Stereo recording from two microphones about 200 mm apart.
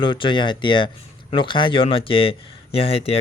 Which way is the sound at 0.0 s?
25° left (ahead or behind).